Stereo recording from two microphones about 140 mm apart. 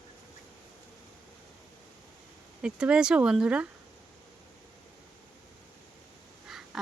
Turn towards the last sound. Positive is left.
turn(degrees=0)  # may be behind; listen again after turning